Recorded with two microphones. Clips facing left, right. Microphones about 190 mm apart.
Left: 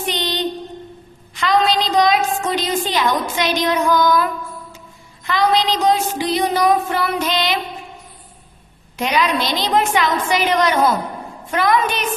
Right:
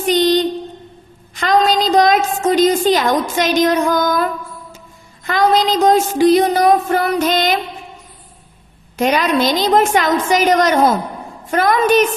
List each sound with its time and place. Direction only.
0.1 s music: 45° right (ahead or behind)
1.4 s a woman's voice: 45° right (ahead or behind)
5.2 s a woman's voice: 45° right (ahead or behind)
9.0 s a woman's voice: 45° right (ahead or behind)